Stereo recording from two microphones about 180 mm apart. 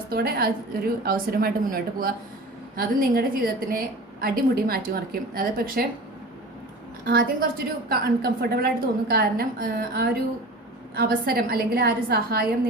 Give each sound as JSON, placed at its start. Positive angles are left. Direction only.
{"t": 0.1, "sound": "a woman's voice", "side_deg": -60}
{"t": 7.1, "sound": "a woman's voice", "side_deg": -55}